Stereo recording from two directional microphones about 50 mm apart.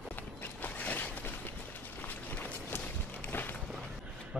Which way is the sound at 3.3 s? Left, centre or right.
Left.